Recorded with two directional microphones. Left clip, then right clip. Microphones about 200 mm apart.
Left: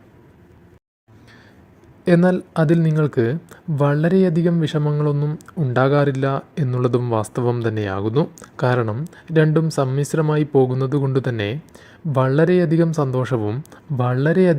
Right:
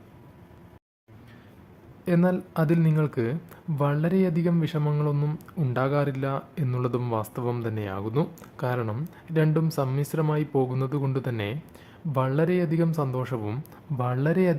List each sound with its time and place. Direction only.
2.0 s speech: 25° left (ahead or behind)
5.7 s speech: 25° left (ahead or behind)